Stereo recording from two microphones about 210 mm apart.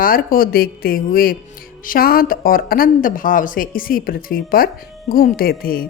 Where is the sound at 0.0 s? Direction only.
45° left (ahead or behind).